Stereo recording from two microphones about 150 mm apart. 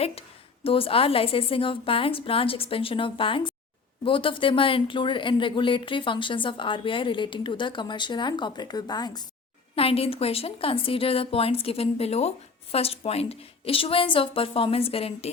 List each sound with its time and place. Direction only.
0.0 s speech: 40° left (ahead or behind)
9.7 s speech: 40° left (ahead or behind)